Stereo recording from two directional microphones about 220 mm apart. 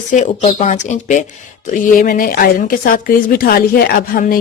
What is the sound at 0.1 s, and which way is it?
A woman's voice, 35° left (ahead or behind).